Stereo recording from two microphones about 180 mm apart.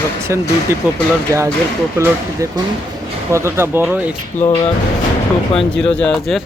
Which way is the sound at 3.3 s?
15° right (ahead or behind).